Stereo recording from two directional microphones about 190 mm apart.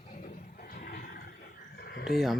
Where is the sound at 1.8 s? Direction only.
60° left (ahead or behind).